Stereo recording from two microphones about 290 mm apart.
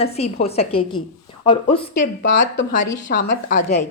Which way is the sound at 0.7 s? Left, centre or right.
Left.